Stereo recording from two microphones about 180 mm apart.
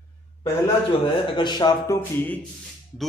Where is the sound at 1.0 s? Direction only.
25° left (ahead or behind).